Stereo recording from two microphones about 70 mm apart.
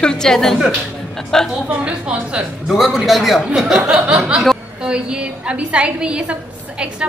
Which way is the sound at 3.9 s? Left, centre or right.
Centre.